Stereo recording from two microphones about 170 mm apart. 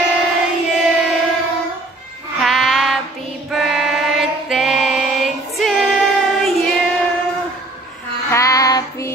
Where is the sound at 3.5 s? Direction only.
Centre (ahead or behind).